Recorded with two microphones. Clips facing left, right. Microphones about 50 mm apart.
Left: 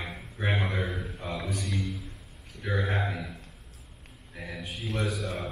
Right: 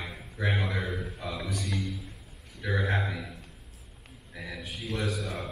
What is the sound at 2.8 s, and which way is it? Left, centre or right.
Speech, centre.